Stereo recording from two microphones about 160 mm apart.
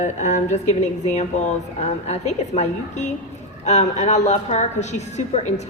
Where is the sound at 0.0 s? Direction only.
50° left (ahead or behind).